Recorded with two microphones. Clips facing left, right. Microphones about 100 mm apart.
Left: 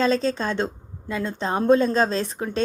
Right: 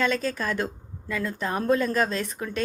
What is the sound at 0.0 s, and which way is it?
A woman's voice, 30° left (ahead or behind).